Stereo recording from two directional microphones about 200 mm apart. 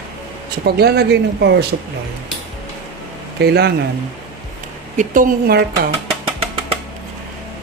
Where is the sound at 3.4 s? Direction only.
55° right (ahead or behind).